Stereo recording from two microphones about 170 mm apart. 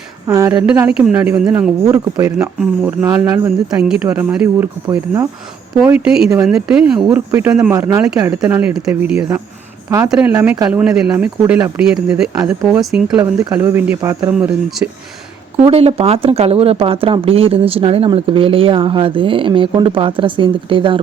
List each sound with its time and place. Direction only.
0.3 s speech: 20° right (ahead or behind)
0.9 s speech: 5° right (ahead or behind)
1.9 s speech: 20° right (ahead or behind)
2.4 s speech: 5° right (ahead or behind)
4.9 s speech: 20° right (ahead or behind)
5.8 s speech: 5° right (ahead or behind)
8.6 s speech: 5° right (ahead or behind)
14.3 s speech: 5° right (ahead or behind)
15.5 s speech: 35° right (ahead or behind)